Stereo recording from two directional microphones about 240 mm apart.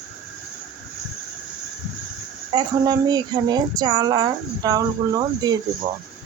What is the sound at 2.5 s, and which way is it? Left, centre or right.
Speech, centre.